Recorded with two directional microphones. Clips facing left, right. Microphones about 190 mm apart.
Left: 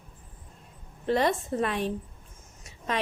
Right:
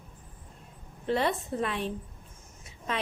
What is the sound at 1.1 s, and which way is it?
Speech, 45° left (ahead or behind).